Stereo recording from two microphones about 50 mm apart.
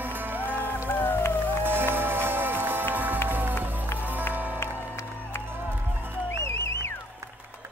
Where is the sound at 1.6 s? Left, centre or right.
Right.